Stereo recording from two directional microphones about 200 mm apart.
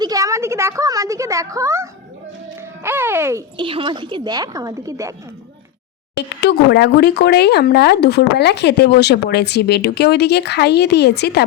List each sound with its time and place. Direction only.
0.0 s a woman's voice: 15° right (ahead or behind)
3.6 s a woman's voice: 25° right (ahead or behind)
6.1 s speech: 55° left (ahead or behind)